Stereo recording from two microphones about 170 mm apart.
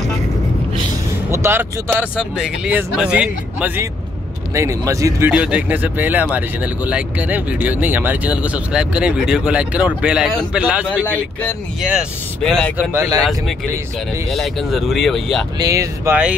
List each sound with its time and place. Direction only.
1.3 s speech: 15° right (ahead or behind)
5.3 s speech: 5° right (ahead or behind)
12.9 s speech: 15° right (ahead or behind)
14.3 s speech: centre (ahead or behind)
15.6 s speech: 20° right (ahead or behind)